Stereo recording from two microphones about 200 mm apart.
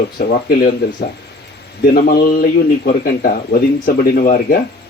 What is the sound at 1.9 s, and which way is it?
Speech, 50° left (ahead or behind).